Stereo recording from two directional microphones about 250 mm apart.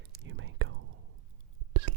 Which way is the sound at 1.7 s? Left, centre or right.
Right.